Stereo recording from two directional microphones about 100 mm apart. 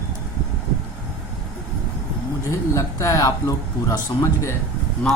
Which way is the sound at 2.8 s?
30° left (ahead or behind).